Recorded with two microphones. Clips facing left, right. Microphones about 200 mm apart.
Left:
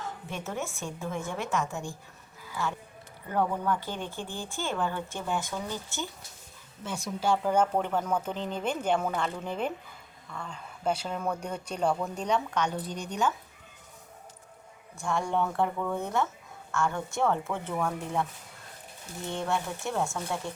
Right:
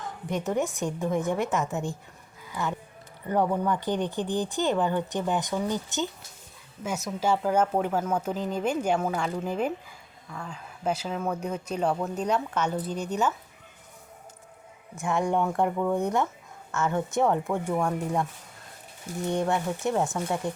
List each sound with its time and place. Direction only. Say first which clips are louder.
0.0 s a woman's voice: right 6 dB; 15° right (ahead or behind)
3.2 s speech: right 3 dB; 15° right (ahead or behind)
15.0 s speech: right 3 dB; 15° right (ahead or behind)
19.3 s speech: right 5 dB; 15° right (ahead or behind)